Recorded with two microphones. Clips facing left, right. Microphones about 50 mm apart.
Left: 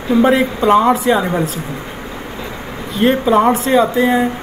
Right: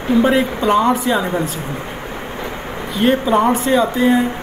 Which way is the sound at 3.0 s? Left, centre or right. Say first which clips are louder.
Left 2 dB; centre.